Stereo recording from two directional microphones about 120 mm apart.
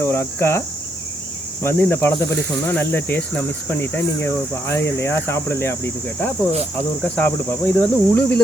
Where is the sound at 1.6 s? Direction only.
20° left (ahead or behind).